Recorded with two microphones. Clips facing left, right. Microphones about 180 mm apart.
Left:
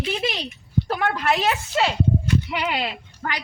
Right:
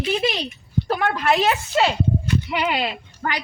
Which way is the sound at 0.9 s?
40° right (ahead or behind).